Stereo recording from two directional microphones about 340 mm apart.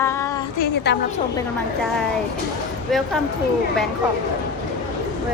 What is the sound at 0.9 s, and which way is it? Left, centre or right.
Speech, left.